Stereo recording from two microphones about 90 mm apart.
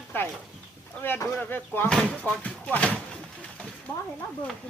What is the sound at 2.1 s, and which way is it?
Speech, 15° left (ahead or behind).